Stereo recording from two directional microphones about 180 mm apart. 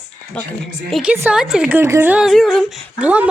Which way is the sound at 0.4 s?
5° left (ahead or behind).